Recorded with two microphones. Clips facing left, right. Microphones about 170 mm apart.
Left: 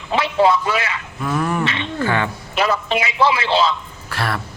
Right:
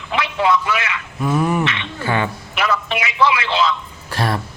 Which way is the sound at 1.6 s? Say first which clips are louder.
Even; 35° left (ahead or behind).